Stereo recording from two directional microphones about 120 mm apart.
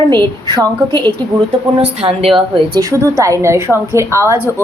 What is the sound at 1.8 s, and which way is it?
Speech, 55° right (ahead or behind).